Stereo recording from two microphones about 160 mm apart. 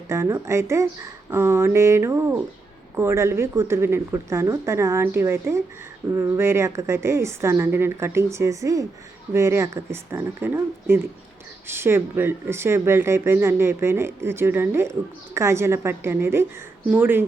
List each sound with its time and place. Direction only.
0.1 s speech: 15° right (ahead or behind)